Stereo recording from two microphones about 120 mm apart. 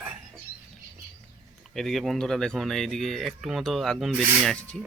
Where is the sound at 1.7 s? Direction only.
Centre (ahead or behind).